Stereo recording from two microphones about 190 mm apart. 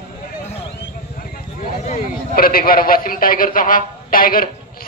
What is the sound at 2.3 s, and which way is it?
A man's voice, 50° left (ahead or behind).